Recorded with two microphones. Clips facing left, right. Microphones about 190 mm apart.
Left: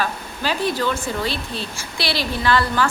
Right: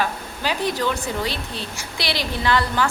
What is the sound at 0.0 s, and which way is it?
Speech, 15° right (ahead or behind).